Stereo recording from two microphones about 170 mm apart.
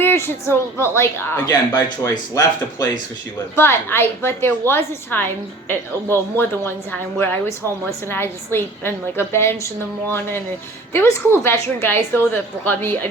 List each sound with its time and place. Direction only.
0.0 s a woman's voice: 15° left (ahead or behind)